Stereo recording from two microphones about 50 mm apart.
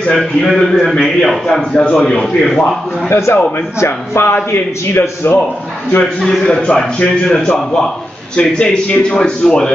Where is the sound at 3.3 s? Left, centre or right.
Left.